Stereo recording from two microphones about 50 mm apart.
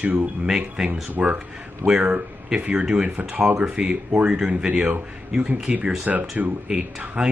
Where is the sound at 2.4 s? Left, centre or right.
Right.